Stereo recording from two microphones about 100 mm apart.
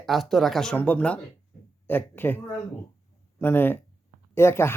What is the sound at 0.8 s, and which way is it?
Speech, 15° left (ahead or behind).